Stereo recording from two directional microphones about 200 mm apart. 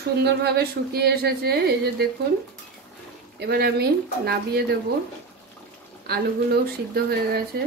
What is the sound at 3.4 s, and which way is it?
Speech, 55° right (ahead or behind).